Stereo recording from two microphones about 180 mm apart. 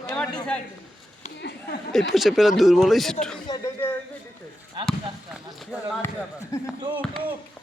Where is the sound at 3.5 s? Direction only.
20° left (ahead or behind).